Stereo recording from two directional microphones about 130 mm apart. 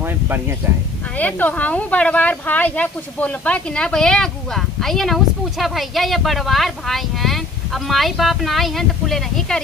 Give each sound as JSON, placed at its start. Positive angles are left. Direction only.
{"t": 0.6, "sound": "speech", "side_deg": -15}
{"t": 1.1, "sound": "speech", "side_deg": 10}